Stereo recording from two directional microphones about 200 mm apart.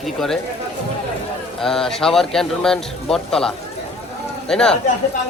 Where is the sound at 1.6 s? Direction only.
Centre (ahead or behind).